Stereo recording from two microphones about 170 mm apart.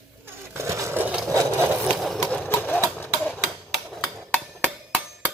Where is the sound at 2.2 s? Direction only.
10° left (ahead or behind).